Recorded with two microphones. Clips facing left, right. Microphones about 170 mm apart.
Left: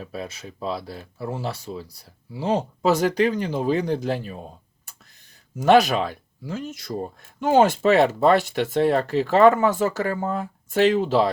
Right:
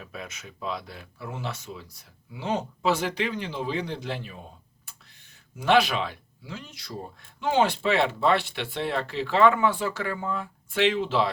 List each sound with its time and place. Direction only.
0.0 s speech: 35° left (ahead or behind)